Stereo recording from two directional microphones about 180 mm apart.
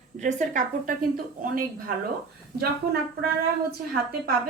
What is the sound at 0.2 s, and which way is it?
A woman's voice, 40° right (ahead or behind).